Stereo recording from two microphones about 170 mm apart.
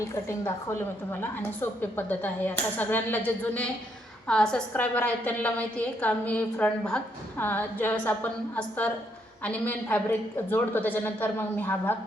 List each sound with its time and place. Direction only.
0.0 s a woman's voice: 15° left (ahead or behind)
1.8 s a woman's voice: 10° left (ahead or behind)